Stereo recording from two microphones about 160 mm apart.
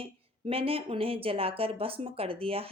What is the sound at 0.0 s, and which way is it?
Speech, 35° right (ahead or behind).